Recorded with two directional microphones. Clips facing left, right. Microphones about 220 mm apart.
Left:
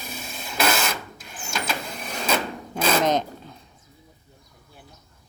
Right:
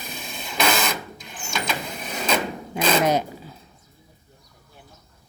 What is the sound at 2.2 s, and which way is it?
Rub, 5° left (ahead or behind).